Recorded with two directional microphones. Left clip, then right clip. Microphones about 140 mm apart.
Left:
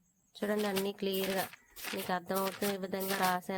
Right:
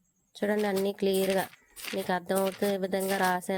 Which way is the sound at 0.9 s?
45° right (ahead or behind).